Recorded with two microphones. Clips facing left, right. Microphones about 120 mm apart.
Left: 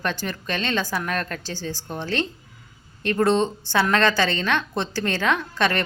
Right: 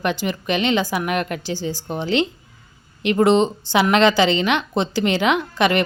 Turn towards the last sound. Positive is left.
turn(degrees=-15)  # may be behind; listen again after turning